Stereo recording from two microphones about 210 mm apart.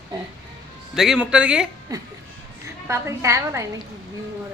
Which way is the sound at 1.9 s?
15° right (ahead or behind).